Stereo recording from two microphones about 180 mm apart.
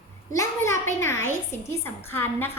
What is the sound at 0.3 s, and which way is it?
A child's voice, 15° left (ahead or behind).